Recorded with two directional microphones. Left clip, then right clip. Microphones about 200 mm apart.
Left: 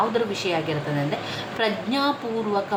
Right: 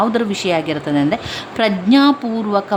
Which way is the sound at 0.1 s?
50° right (ahead or behind).